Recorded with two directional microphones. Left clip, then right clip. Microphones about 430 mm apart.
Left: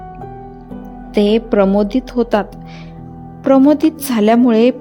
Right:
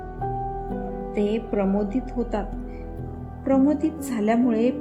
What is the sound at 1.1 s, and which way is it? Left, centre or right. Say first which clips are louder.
A woman's voice: left 12 dB; left.